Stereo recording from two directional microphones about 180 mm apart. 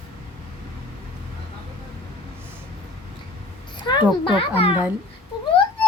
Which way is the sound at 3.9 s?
25° left (ahead or behind).